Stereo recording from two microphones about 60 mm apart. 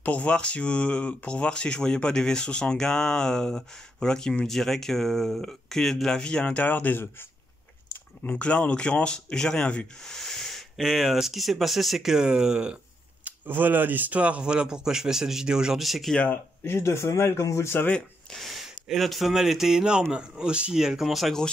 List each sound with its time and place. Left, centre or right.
0.0 s speech: left; by 6.2 s centre
6.2 s speech: centre; by 7.2 s left
8.2 s speech: left
10.1 s snort: centre
10.8 s speech: centre
13.2 s speech: right; by 16.2 s centre
16.3 s speech: left
18.3 s speech: centre